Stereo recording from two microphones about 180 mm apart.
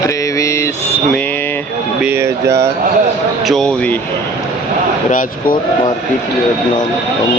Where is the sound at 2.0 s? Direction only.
15° right (ahead or behind).